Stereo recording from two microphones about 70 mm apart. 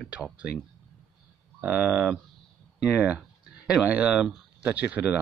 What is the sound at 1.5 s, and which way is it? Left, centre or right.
Speech, right.